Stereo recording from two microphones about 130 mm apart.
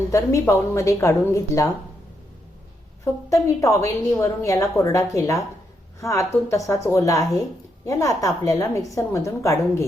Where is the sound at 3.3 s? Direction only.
25° left (ahead or behind).